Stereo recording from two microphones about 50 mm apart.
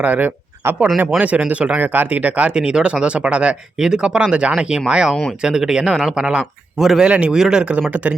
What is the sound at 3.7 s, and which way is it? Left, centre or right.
Speech, centre.